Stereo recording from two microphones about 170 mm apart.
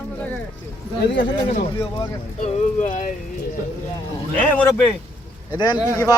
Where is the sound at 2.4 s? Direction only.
45° left (ahead or behind).